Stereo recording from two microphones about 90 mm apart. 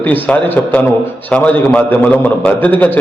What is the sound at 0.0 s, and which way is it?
A man's voice, 20° left (ahead or behind).